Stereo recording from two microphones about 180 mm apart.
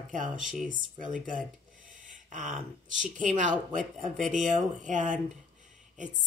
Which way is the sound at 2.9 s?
45° right (ahead or behind).